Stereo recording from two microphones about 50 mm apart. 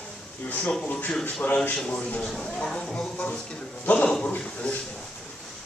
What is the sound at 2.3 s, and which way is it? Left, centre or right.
Speech, centre.